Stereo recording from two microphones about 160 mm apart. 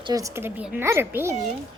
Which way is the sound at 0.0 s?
20° right (ahead or behind).